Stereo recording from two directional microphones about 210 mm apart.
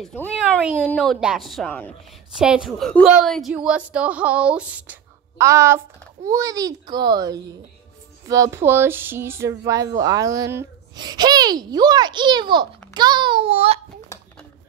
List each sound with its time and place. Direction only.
0.0 s a woman's voice: 10° left (ahead or behind); by 13.7 s 25° right (ahead or behind)